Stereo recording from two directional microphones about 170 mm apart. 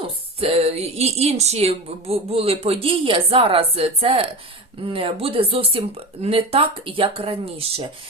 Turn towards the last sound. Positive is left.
turn(degrees=-35)  # may be behind; listen again after turning